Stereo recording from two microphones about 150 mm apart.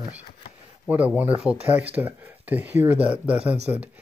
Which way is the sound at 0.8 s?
10° right (ahead or behind).